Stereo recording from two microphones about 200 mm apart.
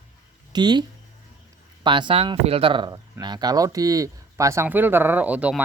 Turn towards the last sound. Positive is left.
turn(degrees=-5)  # may be behind; listen again after turning